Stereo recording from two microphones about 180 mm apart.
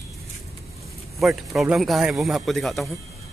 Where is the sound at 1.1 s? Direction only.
Centre (ahead or behind).